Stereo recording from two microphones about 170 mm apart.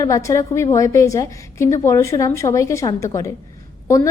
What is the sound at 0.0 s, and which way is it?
A woman's voice, 20° left (ahead or behind).